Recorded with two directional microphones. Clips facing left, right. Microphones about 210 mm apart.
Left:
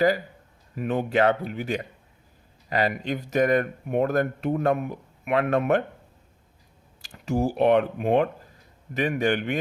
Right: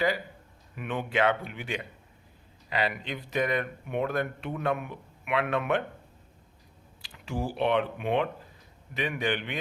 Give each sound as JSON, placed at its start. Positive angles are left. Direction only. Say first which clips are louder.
{"t": 0.8, "sound": "speech", "louder": "left 5 dB", "side_deg": 40}
{"t": 7.0, "sound": "speech", "louder": "left 8 dB", "side_deg": 45}